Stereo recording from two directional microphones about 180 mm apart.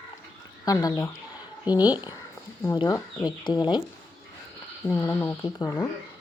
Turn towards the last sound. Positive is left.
turn(degrees=20)  # may be behind; listen again after turning